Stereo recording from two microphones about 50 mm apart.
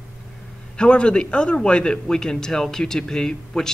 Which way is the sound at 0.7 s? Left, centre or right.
Centre.